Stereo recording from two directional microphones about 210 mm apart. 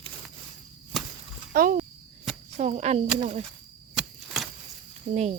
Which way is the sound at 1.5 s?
45° right (ahead or behind).